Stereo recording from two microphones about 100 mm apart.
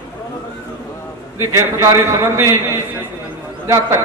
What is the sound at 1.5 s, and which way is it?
A man's voice, 25° right (ahead or behind).